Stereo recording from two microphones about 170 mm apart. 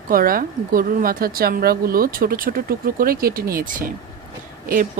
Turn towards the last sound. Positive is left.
turn(degrees=-55)  # may be behind; listen again after turning